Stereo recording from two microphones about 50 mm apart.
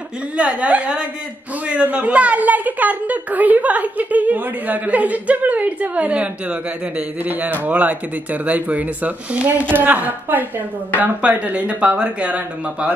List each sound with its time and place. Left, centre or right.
0.4 s a woman's voice: right